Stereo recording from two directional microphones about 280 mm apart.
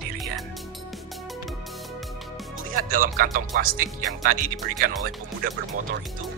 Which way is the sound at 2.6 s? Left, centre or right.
Right.